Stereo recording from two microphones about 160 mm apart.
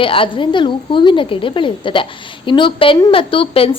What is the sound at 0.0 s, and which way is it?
A woman's voice, 35° left (ahead or behind).